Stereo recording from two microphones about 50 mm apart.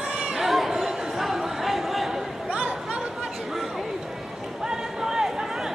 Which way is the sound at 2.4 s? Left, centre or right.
Right.